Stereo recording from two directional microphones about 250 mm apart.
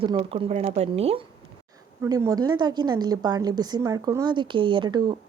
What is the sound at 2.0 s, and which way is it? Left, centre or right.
A woman's voice, centre.